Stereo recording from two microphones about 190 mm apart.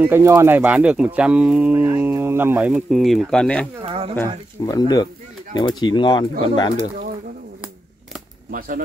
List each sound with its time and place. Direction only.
0.0 s speech: 15° right (ahead or behind); by 3.6 s 5° left (ahead or behind)
3.8 s a sound: 30° right (ahead or behind)
4.6 s speech: 20° left (ahead or behind)
8.5 s speech: 45° right (ahead or behind)